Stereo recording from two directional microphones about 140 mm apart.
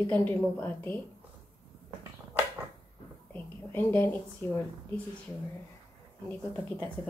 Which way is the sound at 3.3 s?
15° left (ahead or behind).